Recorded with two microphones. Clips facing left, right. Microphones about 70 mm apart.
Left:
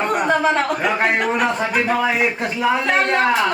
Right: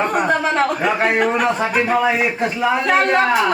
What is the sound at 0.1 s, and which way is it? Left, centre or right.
A man's voice, centre.